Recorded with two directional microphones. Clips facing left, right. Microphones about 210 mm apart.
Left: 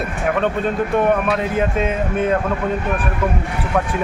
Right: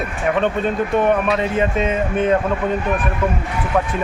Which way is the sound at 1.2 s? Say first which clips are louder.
Right 1 dB; 5° left (ahead or behind).